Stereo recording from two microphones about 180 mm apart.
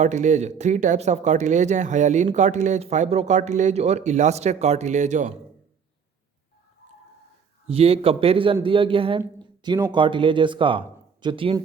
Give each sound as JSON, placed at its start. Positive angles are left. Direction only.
{"t": 0.0, "sound": "speech", "side_deg": -40}
{"t": 7.7, "sound": "speech", "side_deg": -35}